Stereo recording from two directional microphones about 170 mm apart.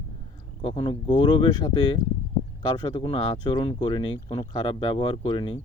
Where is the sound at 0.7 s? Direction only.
30° left (ahead or behind).